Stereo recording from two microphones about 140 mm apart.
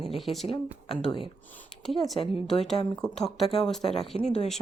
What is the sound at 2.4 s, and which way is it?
Speech, 5° left (ahead or behind).